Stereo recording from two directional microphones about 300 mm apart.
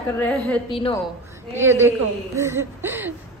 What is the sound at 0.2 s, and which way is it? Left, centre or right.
Speech, centre.